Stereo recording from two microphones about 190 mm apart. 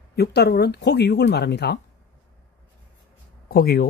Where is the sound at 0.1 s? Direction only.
60° left (ahead or behind).